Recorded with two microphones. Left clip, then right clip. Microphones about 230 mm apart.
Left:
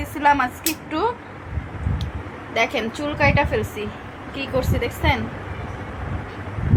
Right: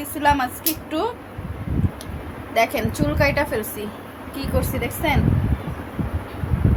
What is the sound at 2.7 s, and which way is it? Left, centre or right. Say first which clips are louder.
A woman's voice: right 1 dB; centre.